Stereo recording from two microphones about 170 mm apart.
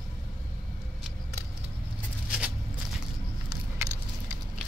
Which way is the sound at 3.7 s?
15° right (ahead or behind).